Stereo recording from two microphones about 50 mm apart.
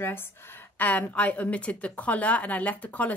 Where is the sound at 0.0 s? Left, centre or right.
Left.